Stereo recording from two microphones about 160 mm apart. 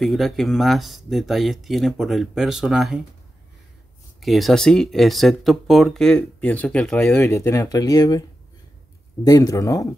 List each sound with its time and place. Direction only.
0.0 s speech: centre (ahead or behind)
4.2 s speech: centre (ahead or behind); by 9.8 s 20° left (ahead or behind)